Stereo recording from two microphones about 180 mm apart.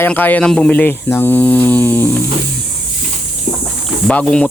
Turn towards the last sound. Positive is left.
turn(degrees=5)  # may be behind; listen again after turning